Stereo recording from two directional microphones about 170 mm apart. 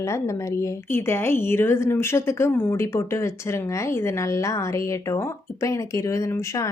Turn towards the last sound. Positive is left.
turn(degrees=20)  # may be behind; listen again after turning